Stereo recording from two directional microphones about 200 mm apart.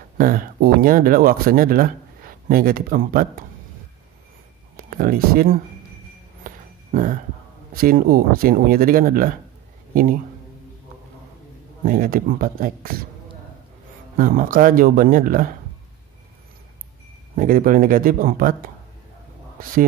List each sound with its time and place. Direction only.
0.2 s speech: 45° right (ahead or behind)
4.7 s speech: 45° right (ahead or behind)
6.4 s a sound: 45° right (ahead or behind)
7.7 s speech: 45° right (ahead or behind)
11.8 s speech: 45° right (ahead or behind)
14.1 s speech: 45° right (ahead or behind)
17.4 s speech: 45° right (ahead or behind)